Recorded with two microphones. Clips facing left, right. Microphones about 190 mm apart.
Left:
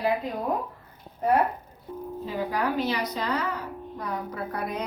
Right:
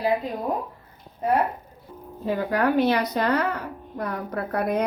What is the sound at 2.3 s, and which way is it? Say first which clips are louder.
A woman's voice: right 6 dB; 60° right (ahead or behind).